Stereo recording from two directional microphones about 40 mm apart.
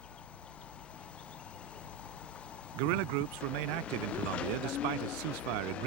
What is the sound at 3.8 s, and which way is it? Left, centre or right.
Speech, left.